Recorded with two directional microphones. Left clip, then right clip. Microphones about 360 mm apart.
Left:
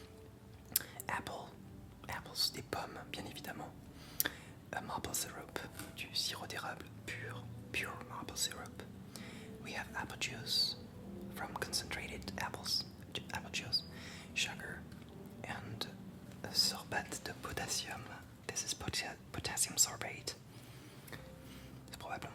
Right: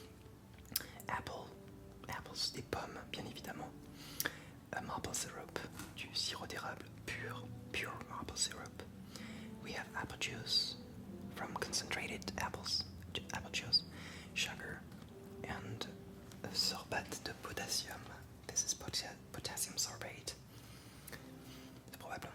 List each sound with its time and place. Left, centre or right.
0.7 s whispering: centre
2.0 s speech: centre
4.2 s a sound: centre
4.7 s speech: centre
15.4 s whispering: centre
16.4 s speech: centre
17.4 s speech: centre
22.0 s a sound: centre